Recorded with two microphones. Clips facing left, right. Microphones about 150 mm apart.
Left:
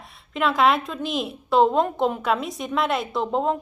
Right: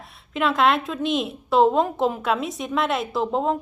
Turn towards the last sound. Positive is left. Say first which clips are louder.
# even
turn(degrees=0)  # may be behind; listen again after turning